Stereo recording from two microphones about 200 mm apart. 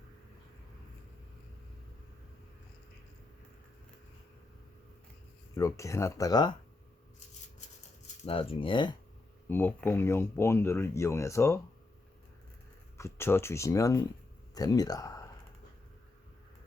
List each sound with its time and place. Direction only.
5.5 s speech: 15° left (ahead or behind)
8.2 s speech: 30° left (ahead or behind)
9.5 s speech: 10° left (ahead or behind)
13.0 s speech: 15° left (ahead or behind)